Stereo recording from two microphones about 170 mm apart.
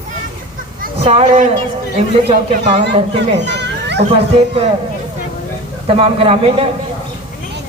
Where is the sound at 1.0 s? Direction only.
35° right (ahead or behind).